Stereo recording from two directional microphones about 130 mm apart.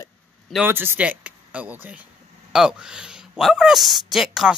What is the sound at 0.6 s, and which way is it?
Speech, 15° right (ahead or behind).